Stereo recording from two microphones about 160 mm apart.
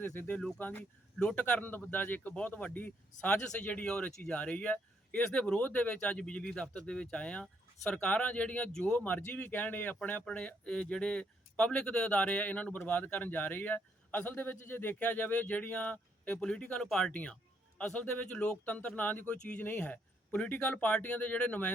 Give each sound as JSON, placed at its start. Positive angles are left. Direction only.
{"t": 0.0, "sound": "speech", "side_deg": 10}